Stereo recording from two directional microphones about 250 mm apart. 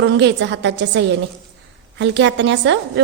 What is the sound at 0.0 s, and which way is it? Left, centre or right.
A woman's voice, right.